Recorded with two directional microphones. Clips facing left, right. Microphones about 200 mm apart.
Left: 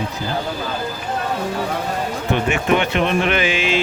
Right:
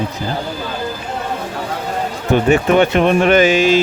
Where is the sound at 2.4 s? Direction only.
40° right (ahead or behind).